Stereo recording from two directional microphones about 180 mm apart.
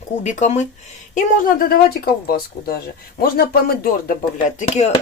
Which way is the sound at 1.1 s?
55° left (ahead or behind).